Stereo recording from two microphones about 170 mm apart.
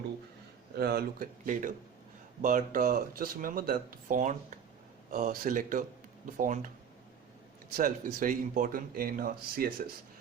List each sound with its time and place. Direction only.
0.8 s speech: 65° right (ahead or behind)
7.8 s speech: 55° right (ahead or behind)